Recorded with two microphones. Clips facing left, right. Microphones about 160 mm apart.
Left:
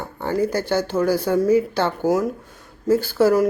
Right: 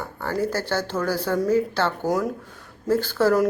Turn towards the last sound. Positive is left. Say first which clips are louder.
# left 3 dB
turn(degrees=10)  # may be behind; listen again after turning